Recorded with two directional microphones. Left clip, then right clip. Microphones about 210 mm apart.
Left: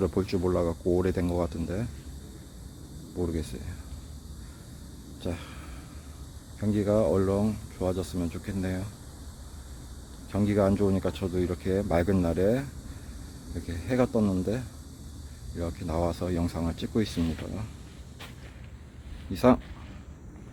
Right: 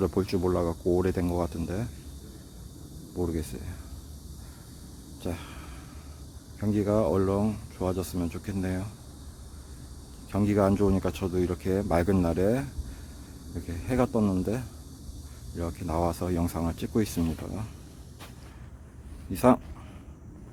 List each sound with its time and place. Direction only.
0.0 s speech: 5° right (ahead or behind)
3.2 s speech: 5° right (ahead or behind)
5.2 s a sound: centre (ahead or behind)
6.6 s speech: 5° right (ahead or behind)
10.3 s speech: 10° right (ahead or behind)
13.7 s speech: 5° right (ahead or behind)
19.3 s speech: 10° right (ahead or behind)